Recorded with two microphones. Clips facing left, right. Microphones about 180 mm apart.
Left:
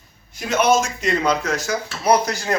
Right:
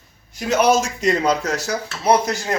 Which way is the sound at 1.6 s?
25° right (ahead or behind).